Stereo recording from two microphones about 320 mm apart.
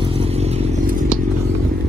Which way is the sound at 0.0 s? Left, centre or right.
Centre.